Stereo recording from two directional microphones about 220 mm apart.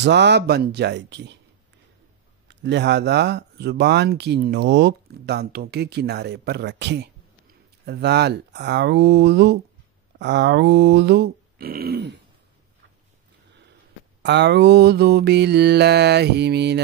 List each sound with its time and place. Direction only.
0.0 s speech: 50° right (ahead or behind)
2.4 s speech: 50° right (ahead or behind)
14.2 s speech: 50° right (ahead or behind)